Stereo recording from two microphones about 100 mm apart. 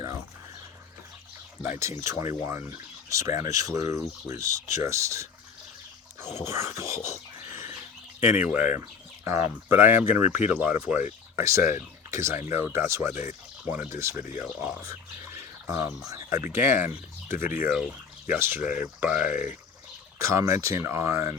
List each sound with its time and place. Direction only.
2.0 s speech: 30° right (ahead or behind)
6.1 s a sound: 25° right (ahead or behind)
8.2 s speech: 20° right (ahead or behind)
14.4 s speech: 10° right (ahead or behind)
14.8 s speech: 30° right (ahead or behind)
18.6 s speech: 15° right (ahead or behind)
20.1 s speech: 30° right (ahead or behind)